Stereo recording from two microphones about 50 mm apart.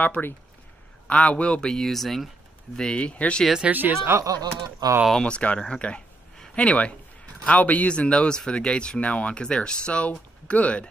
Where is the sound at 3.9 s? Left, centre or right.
Right.